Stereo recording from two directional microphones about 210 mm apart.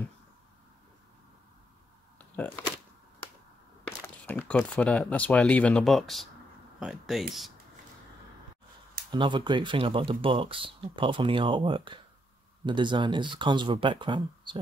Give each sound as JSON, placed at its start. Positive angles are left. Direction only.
{"t": 2.1, "sound": "a sound", "side_deg": 10}
{"t": 4.3, "sound": "speech", "side_deg": 5}
{"t": 9.1, "sound": "speech", "side_deg": -20}